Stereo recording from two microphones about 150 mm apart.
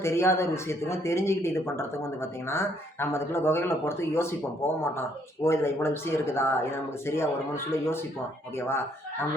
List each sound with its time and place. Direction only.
0.0 s speech: 15° left (ahead or behind)